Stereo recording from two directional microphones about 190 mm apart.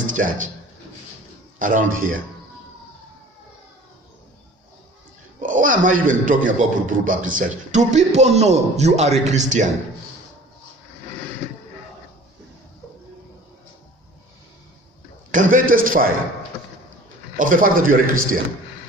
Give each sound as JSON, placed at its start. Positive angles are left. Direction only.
{"t": 0.0, "sound": "speech", "side_deg": -45}
{"t": 1.6, "sound": "a man's voice", "side_deg": -45}
{"t": 5.4, "sound": "a man's voice", "side_deg": -45}
{"t": 15.3, "sound": "a man's voice", "side_deg": -45}
{"t": 17.4, "sound": "a man's voice", "side_deg": -45}